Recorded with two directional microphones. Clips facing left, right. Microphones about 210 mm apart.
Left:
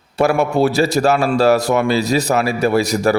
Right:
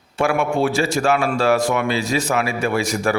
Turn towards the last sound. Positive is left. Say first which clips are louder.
# left 5 dB
turn(degrees=35)  # may be behind; listen again after turning